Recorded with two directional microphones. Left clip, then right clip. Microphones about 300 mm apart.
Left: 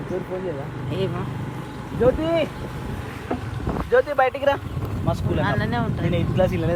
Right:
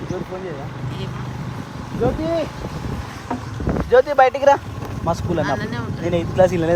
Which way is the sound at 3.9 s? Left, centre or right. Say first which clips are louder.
Right 5 dB; right.